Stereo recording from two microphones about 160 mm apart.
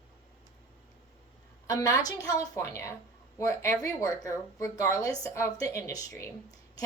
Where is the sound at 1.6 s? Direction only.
20° left (ahead or behind).